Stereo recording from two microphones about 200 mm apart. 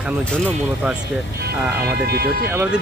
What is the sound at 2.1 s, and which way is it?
Speech, 50° right (ahead or behind).